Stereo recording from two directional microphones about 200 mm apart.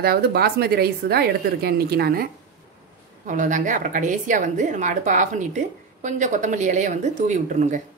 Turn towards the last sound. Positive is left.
turn(degrees=-40)  # may be behind; listen again after turning